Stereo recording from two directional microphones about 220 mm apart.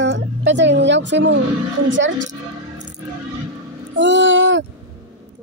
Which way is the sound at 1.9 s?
55° right (ahead or behind).